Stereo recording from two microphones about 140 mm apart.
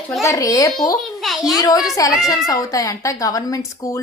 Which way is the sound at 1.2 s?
Centre (ahead or behind).